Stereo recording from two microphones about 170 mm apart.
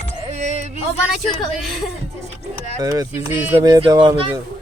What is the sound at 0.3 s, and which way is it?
Music, 40° right (ahead or behind).